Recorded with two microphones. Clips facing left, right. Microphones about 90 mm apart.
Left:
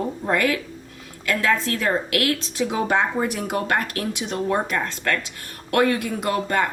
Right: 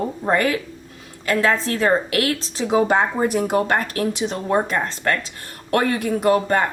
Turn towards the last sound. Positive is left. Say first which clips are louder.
# right 5 dB
turn(degrees=-35)  # may be behind; listen again after turning